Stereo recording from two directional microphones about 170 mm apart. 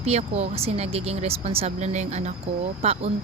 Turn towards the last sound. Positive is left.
turn(degrees=-40)  # may be behind; listen again after turning